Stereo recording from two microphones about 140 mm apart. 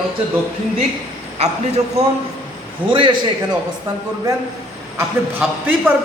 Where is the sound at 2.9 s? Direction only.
35° right (ahead or behind).